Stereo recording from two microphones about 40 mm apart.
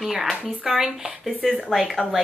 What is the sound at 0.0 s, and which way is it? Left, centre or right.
A woman's voice, centre.